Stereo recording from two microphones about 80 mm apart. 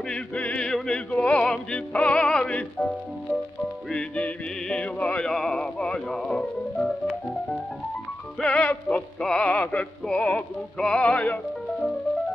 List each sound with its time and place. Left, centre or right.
0.1 s music: centre
3.9 s music: centre
8.4 s music: centre